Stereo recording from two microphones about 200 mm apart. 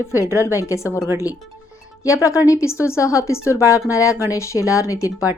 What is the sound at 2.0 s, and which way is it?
Speech, 15° left (ahead or behind).